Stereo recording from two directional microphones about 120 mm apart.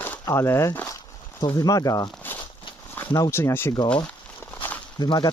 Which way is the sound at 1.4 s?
35° left (ahead or behind).